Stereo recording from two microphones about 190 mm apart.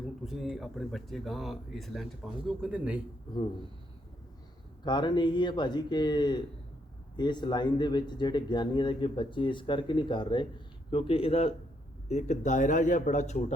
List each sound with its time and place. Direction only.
0.0 s speech: centre (ahead or behind)
4.9 s a man's voice: 25° left (ahead or behind); by 13.4 s 40° left (ahead or behind)